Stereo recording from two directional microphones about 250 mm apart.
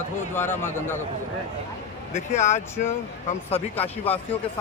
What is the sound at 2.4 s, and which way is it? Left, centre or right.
Speech, left.